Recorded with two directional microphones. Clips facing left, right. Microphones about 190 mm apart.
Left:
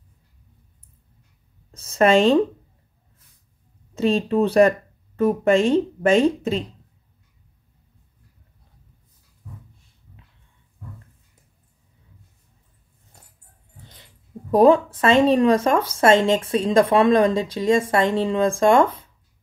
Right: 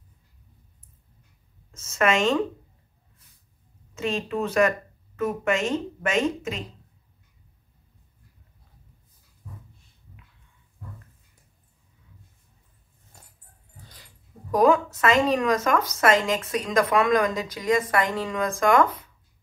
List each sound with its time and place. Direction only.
1.7 s a woman's voice: 35° left (ahead or behind)
3.9 s speech: 35° left (ahead or behind)
14.5 s speech: 30° left (ahead or behind)